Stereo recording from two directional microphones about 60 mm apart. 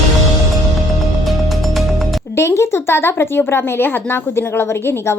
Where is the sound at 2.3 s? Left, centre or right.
Left.